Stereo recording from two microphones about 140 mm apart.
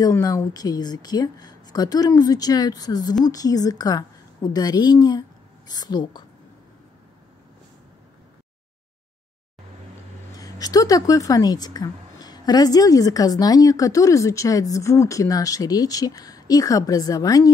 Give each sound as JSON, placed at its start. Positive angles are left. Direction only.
{"t": 0.0, "sound": "a woman's voice", "side_deg": 25}
{"t": 10.3, "sound": "a woman's voice", "side_deg": 25}